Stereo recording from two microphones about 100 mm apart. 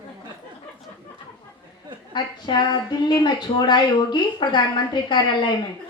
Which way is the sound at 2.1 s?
50° left (ahead or behind).